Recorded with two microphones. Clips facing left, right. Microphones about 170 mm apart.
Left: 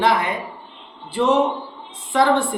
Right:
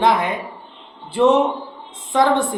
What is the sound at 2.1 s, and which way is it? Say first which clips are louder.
Speech: right 1 dB; 20° right (ahead or behind).